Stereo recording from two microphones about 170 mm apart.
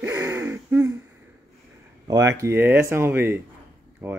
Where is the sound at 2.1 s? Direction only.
15° right (ahead or behind).